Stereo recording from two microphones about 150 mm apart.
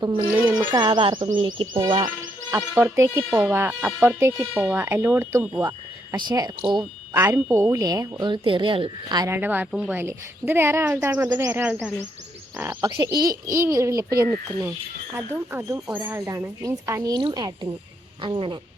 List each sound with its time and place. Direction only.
0.0 s speech: 35° right (ahead or behind)
0.3 s a woman's voice: 10° right (ahead or behind)
0.7 s speech: 30° right (ahead or behind)
2.5 s a woman's voice: 15° right (ahead or behind)
4.2 s a woman's voice: 15° right (ahead or behind)
4.5 s speech: 5° right (ahead or behind)
4.8 s a woman's voice: 15° right (ahead or behind)
5.6 s speech: 30° right (ahead or behind)
9.3 s a woman's voice: 15° right (ahead or behind)
12.8 s a woman's voice: 25° right (ahead or behind)